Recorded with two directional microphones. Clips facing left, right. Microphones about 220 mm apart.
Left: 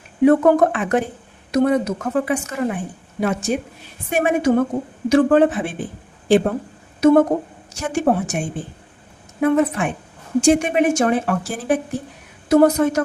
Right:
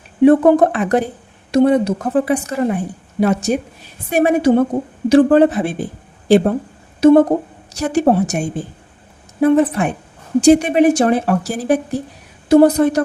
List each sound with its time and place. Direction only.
0.3 s a woman's voice: 30° right (ahead or behind)
7.0 s a woman's voice: 30° right (ahead or behind)